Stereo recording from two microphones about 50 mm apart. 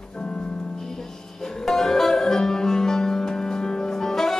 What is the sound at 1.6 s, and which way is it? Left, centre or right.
Music, centre.